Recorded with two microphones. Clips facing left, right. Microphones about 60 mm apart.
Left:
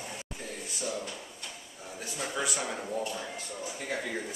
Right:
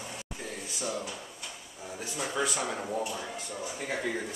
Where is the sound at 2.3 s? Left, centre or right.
Centre.